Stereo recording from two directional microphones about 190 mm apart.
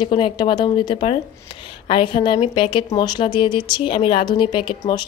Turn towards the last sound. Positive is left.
turn(degrees=25)  # may be behind; listen again after turning